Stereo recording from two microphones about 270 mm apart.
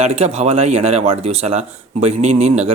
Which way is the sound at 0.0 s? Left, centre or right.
Right.